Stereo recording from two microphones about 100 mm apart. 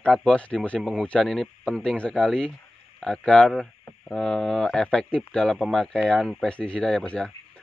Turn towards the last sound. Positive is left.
turn(degrees=10)  # may be behind; listen again after turning